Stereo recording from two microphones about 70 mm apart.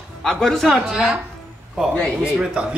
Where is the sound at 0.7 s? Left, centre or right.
Centre.